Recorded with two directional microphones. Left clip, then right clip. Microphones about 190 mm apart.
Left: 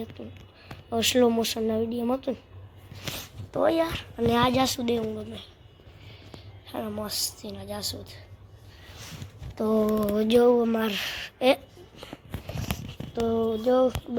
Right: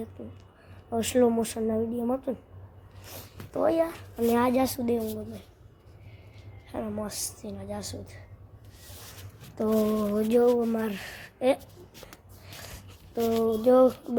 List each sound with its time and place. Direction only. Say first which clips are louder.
0.2 s a woman's voice: left 2 dB; 10° left (ahead or behind)
3.5 s a woman's voice: left 1 dB; 5° left (ahead or behind)
6.7 s a woman's voice: left 1 dB; centre (ahead or behind)
9.6 s a woman's voice: left 1 dB; 5° right (ahead or behind)
9.8 s a woman's voice: left 2 dB; 5° left (ahead or behind)
13.2 s a woman's voice: even; centre (ahead or behind)
13.6 s speech: right 4 dB; 15° right (ahead or behind)